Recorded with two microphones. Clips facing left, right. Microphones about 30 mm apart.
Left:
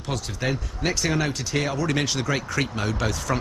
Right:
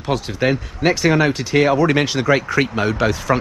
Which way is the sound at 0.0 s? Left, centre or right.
Right.